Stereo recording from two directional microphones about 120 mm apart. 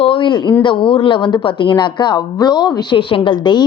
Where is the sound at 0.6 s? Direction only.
45° left (ahead or behind).